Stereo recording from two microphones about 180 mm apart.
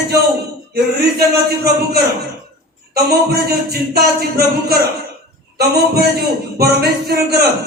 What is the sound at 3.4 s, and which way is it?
A man's voice, 60° right (ahead or behind).